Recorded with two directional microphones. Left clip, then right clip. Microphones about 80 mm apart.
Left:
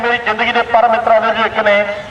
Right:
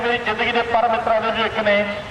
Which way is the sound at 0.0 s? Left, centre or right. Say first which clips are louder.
Left 6 dB; left.